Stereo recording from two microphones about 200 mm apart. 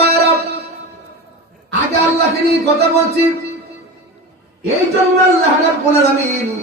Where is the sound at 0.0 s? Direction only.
55° right (ahead or behind).